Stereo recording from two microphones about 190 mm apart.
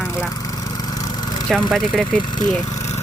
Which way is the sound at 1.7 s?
5° left (ahead or behind).